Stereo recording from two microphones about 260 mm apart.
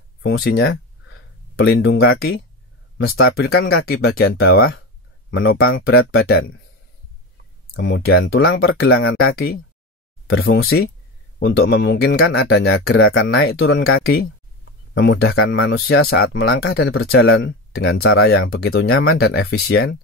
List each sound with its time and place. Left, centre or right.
0.2 s speech: left
3.5 s speech: left
7.7 s speech: left
8.5 s speech: left
9.3 s speech: left
10.2 s speech: left
10.5 s speech: left
16.1 s speech: left
17.2 s speech: left
18.7 s speech: left
19.1 s speech: left